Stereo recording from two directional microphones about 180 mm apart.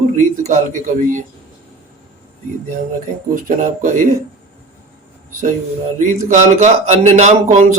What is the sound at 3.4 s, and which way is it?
Speech, 50° right (ahead or behind).